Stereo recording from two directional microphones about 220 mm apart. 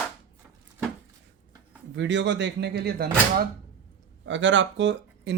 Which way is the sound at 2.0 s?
55° right (ahead or behind).